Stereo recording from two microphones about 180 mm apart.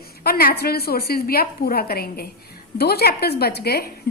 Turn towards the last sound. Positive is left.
turn(degrees=60)  # may be behind; listen again after turning